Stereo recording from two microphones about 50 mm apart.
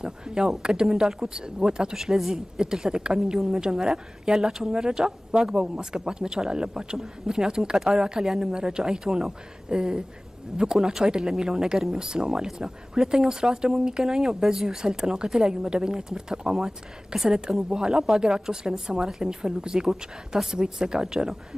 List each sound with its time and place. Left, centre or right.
0.0 s speech: centre